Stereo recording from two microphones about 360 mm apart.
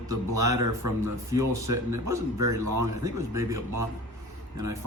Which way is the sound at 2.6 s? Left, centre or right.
Right.